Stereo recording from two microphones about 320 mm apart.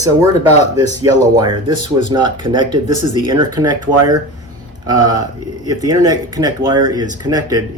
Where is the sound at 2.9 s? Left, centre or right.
Left.